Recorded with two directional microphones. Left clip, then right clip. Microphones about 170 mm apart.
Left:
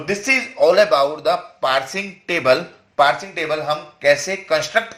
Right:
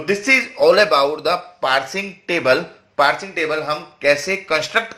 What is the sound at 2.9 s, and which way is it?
Speech, 15° right (ahead or behind).